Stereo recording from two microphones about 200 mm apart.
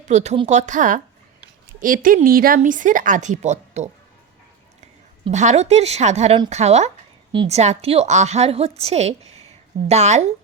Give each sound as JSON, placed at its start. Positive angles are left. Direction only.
{"t": 0.1, "sound": "a woman's voice", "side_deg": -35}